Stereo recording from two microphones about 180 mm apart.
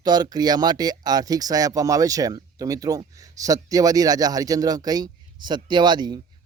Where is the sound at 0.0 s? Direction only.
20° right (ahead or behind).